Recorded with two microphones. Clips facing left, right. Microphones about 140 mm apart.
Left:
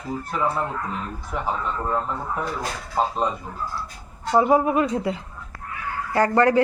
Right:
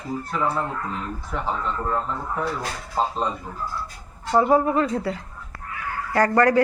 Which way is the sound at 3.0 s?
10° left (ahead or behind).